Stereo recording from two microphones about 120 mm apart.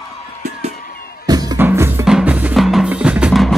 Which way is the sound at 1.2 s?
35° right (ahead or behind).